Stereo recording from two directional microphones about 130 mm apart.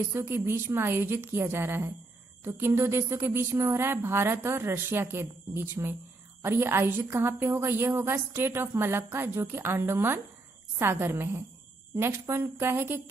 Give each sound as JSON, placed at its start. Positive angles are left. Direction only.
{"t": 0.1, "sound": "a woman's voice", "side_deg": -15}